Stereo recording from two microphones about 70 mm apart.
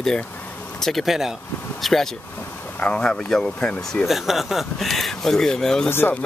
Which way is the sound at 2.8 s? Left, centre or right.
Centre.